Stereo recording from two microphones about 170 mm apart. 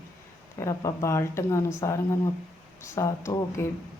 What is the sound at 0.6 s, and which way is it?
Speech, 20° left (ahead or behind).